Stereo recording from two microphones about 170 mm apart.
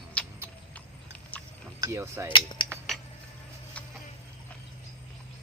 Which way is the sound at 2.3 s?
30° left (ahead or behind).